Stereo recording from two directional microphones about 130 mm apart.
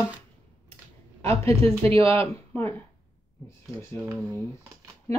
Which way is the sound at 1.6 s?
45° right (ahead or behind).